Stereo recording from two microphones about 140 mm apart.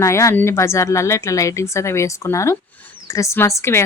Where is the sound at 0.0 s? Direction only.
20° left (ahead or behind).